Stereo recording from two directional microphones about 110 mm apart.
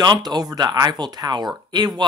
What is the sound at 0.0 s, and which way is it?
Speech, 40° right (ahead or behind).